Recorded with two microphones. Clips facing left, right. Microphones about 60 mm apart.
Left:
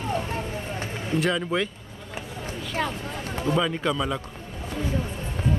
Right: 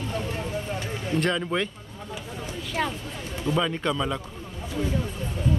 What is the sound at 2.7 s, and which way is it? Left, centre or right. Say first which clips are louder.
Speech: even; centre.